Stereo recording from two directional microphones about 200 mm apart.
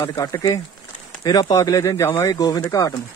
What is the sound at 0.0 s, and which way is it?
Speech, 20° left (ahead or behind).